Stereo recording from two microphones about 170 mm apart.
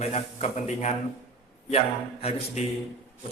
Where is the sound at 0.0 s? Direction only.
40° left (ahead or behind).